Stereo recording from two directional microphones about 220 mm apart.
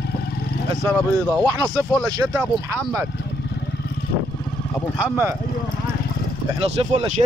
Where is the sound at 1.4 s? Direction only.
15° right (ahead or behind).